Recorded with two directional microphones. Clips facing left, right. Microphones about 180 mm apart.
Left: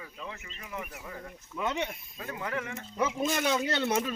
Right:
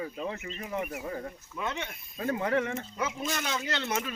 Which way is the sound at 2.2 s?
30° right (ahead or behind).